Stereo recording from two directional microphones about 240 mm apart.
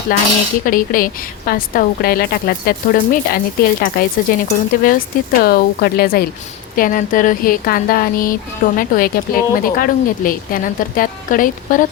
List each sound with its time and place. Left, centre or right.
0.1 s a woman's voice: left